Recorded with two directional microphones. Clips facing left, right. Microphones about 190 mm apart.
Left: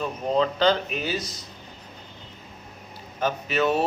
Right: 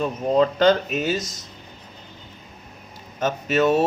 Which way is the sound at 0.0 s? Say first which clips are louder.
Right 4 dB; 45° right (ahead or behind).